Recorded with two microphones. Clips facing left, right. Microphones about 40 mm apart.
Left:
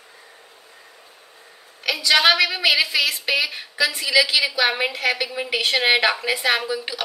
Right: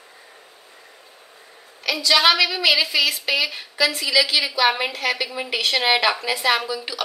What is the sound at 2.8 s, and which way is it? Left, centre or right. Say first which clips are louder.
A woman's voice: right 1 dB; centre.